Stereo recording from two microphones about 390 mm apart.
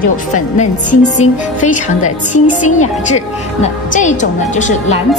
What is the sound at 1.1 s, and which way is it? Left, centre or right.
A woman's voice, centre.